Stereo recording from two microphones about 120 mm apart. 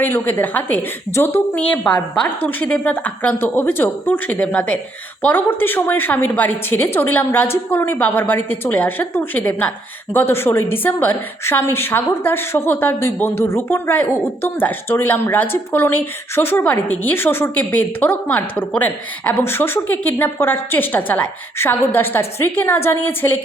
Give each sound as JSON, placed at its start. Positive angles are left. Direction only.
{"t": 0.0, "sound": "a woman's voice", "side_deg": 20}